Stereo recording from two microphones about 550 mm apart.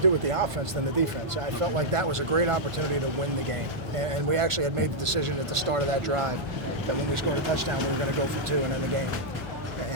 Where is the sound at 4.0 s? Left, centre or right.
Right.